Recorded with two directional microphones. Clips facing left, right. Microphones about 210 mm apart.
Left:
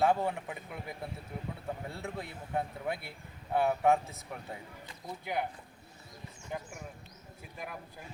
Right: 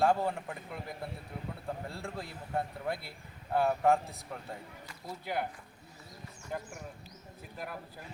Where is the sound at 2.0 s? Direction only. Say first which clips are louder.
Left 1 dB; 5° left (ahead or behind).